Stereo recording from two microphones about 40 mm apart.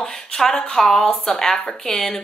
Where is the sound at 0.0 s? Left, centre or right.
Centre.